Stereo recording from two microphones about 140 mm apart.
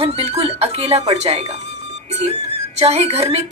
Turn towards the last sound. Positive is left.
turn(degrees=-50)  # may be behind; listen again after turning